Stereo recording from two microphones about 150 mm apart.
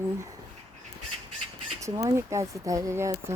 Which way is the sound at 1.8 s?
20° right (ahead or behind).